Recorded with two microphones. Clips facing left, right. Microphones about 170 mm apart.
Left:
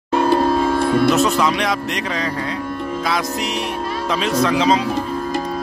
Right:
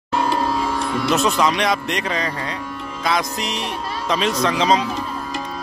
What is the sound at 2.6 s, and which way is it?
Music, 50° left (ahead or behind).